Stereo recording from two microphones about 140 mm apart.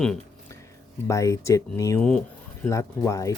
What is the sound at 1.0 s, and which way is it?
Speech, 20° left (ahead or behind).